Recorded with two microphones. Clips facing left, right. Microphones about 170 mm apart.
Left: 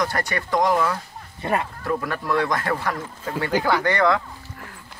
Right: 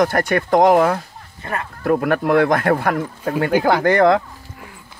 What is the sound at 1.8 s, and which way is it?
Speech, 60° right (ahead or behind).